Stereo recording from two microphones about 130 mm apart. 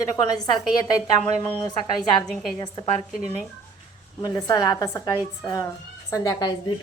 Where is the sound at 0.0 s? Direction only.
30° left (ahead or behind).